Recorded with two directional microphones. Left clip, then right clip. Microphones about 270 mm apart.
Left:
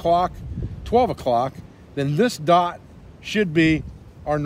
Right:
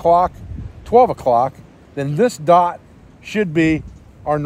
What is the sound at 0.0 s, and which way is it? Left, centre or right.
A man's voice, centre.